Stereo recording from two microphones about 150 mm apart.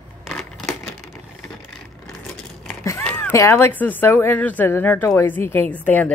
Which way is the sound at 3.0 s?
15° left (ahead or behind).